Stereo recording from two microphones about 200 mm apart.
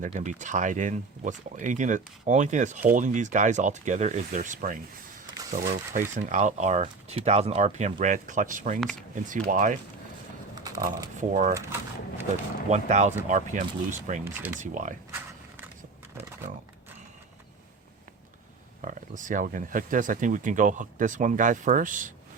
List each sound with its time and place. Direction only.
0.0 s speech: 35° right (ahead or behind)
8.8 s speech: 5° left (ahead or behind)
9.1 s speech: 40° right (ahead or behind)
10.6 s speech: 20° right (ahead or behind)
11.2 s speech: 40° right (ahead or behind)
11.5 s speech: 10° right (ahead or behind)
12.7 s speech: 35° right (ahead or behind)
14.3 s speech: 10° right (ahead or behind)
14.6 s speech: 40° right (ahead or behind)
18.9 s speech: 40° right (ahead or behind)